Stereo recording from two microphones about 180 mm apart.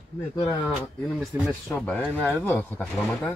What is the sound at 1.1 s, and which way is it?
Speech, 5° right (ahead or behind).